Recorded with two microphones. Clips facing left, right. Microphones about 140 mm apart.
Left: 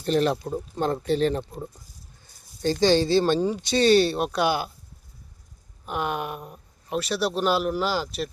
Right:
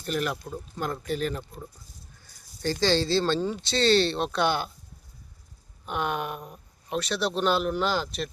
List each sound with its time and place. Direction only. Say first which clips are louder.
0.0 s speech: left 7 dB; 30° left (ahead or behind)
2.2 s a sound: left 4 dB; 20° left (ahead or behind)
2.8 s speech: left 4 dB; 15° left (ahead or behind)
5.8 s speech: left 1 dB; 5° left (ahead or behind)